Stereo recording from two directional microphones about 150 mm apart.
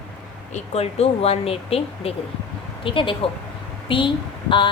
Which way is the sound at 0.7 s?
45° left (ahead or behind).